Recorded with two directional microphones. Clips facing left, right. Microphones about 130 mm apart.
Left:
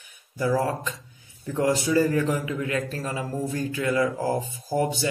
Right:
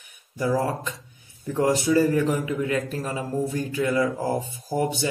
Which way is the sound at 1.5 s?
20° right (ahead or behind).